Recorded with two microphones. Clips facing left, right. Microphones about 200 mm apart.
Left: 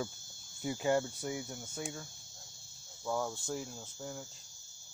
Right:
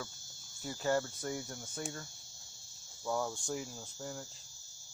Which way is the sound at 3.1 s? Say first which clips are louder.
Even; centre (ahead or behind).